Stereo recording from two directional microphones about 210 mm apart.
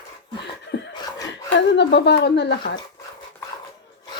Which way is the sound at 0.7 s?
55° left (ahead or behind).